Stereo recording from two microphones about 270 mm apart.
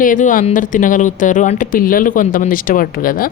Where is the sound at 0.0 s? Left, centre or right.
Left.